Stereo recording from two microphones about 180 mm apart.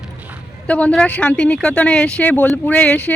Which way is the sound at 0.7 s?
5° left (ahead or behind).